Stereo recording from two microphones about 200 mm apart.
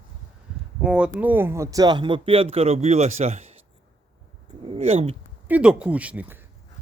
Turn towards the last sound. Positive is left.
turn(degrees=-5)  # may be behind; listen again after turning